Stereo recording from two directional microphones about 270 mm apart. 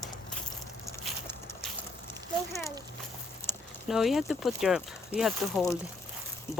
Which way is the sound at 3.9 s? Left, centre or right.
Centre.